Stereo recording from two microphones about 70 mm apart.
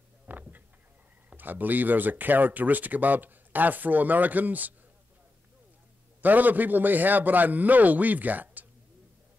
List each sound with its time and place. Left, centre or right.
0.3 s a sound: right
1.3 s speech: right
6.2 s speech: right